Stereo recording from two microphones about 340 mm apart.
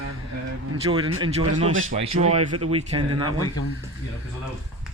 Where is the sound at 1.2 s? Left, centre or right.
Centre.